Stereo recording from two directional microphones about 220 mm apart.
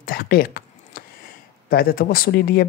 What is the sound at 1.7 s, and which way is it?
Speech, 40° left (ahead or behind).